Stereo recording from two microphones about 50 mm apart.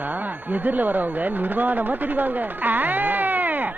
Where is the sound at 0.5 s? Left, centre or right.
Right.